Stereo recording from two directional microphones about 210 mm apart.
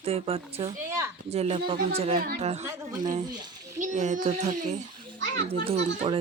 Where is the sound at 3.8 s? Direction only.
35° right (ahead or behind).